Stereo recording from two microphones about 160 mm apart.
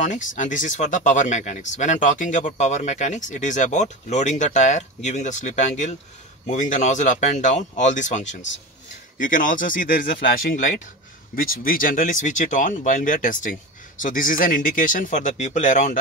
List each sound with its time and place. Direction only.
0.0 s speech: 50° left (ahead or behind)